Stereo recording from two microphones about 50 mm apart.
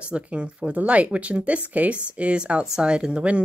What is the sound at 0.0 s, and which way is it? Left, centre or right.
Speech, right.